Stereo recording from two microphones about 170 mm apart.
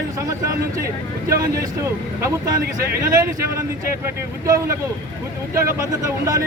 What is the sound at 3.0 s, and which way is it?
Speech, 20° right (ahead or behind).